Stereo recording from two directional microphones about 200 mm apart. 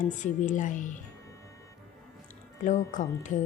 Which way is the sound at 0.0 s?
40° left (ahead or behind).